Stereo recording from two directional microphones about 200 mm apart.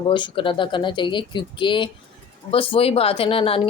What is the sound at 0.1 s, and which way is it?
Speech, 25° left (ahead or behind).